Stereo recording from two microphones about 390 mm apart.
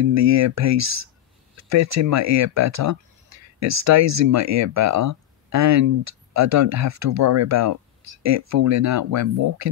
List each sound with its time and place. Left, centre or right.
0.1 s speech: right